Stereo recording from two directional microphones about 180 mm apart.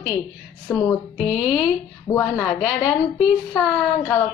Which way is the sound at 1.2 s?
5° right (ahead or behind).